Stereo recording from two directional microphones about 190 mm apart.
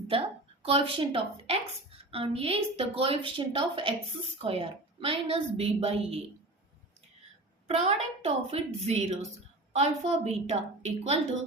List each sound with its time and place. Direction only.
0.1 s a woman's voice: 30° right (ahead or behind)
7.7 s a woman's voice: 35° right (ahead or behind)